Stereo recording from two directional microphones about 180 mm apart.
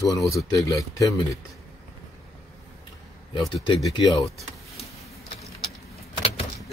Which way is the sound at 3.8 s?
25° left (ahead or behind).